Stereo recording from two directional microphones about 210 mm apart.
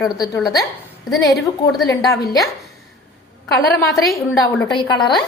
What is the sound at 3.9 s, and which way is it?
Speech, centre (ahead or behind).